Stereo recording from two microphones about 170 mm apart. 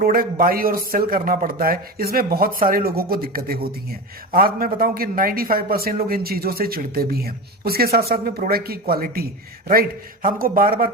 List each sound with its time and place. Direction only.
0.0 s a man's voice: 55° right (ahead or behind)
10.2 s a man's voice: 55° right (ahead or behind)